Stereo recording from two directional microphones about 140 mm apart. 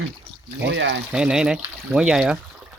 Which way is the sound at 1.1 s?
5° right (ahead or behind).